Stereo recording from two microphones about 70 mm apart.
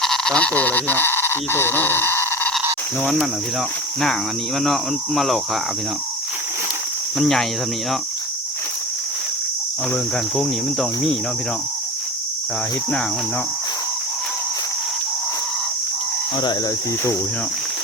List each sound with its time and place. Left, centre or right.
0.0 s speech: centre; by 2.5 s left
4.6 s speech: centre
7.2 s speech: centre
9.9 s cricket: centre